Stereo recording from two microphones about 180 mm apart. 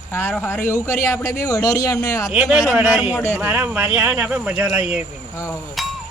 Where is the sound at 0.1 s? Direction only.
10° left (ahead or behind).